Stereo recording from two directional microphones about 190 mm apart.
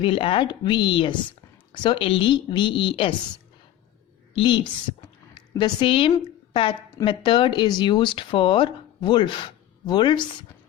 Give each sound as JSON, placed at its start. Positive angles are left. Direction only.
{"t": 0.0, "sound": "speech", "side_deg": 30}
{"t": 4.4, "sound": "a woman's voice", "side_deg": 25}